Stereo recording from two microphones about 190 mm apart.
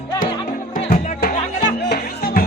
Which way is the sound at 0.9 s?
45° left (ahead or behind).